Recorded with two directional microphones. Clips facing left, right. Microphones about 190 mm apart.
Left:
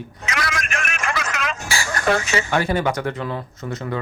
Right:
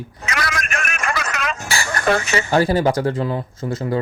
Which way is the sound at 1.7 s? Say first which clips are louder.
Right 1 dB; 60° right (ahead or behind).